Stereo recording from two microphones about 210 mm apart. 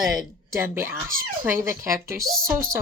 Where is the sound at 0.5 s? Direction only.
10° right (ahead or behind).